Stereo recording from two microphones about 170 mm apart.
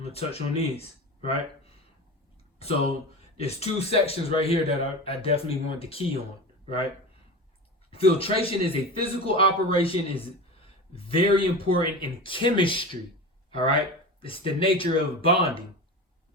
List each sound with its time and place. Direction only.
0.0 s speech: 35° left (ahead or behind)
3.2 s a man's voice: 35° left (ahead or behind)
7.9 s a man's voice: 35° left (ahead or behind)